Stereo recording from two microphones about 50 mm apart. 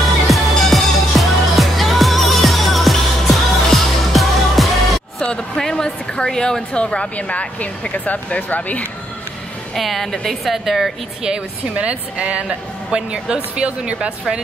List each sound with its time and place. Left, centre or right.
0.3 s music: centre
5.6 s a woman's voice: centre; by 8.8 s left
9.8 s a woman's voice: centre
11.2 s a woman's voice: right